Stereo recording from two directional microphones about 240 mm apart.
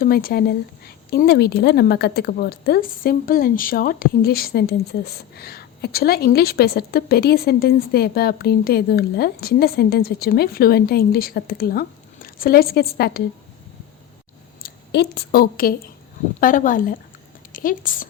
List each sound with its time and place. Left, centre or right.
0.0 s a woman's voice: left
14.6 s a woman's voice: left